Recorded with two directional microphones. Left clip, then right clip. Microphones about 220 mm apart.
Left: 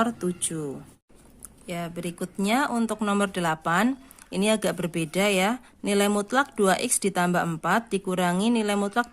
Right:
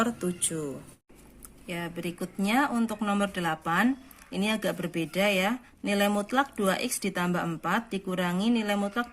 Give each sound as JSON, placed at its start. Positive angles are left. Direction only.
{"t": 0.0, "sound": "speech", "side_deg": 30}
{"t": 1.7, "sound": "speech", "side_deg": 40}